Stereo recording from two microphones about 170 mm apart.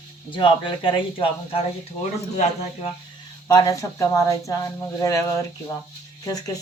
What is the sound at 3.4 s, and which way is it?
Speech, 20° left (ahead or behind).